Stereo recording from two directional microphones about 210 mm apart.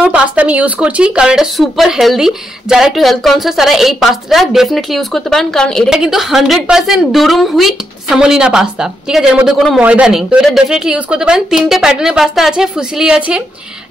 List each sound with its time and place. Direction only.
0.0 s speech: 5° right (ahead or behind)